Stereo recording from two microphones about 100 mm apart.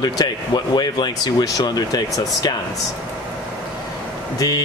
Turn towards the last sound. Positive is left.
turn(degrees=45)  # may be behind; listen again after turning